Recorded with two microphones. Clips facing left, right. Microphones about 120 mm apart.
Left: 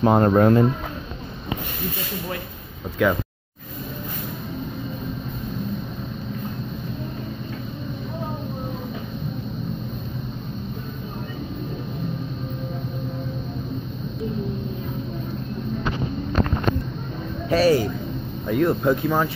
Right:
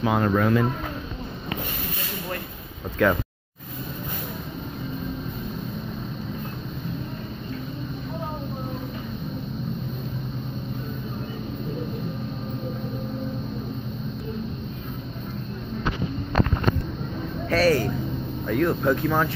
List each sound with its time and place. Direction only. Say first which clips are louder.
0.0 s speech: left 6 dB; 40° left (ahead or behind)
3.0 s speech: even; 10° left (ahead or behind)
17.5 s speech: left 3 dB; 10° left (ahead or behind)